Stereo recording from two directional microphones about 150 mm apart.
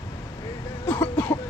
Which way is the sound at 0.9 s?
15° left (ahead or behind).